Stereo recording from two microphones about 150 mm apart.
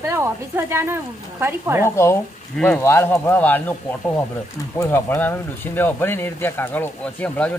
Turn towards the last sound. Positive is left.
turn(degrees=10)  # may be behind; listen again after turning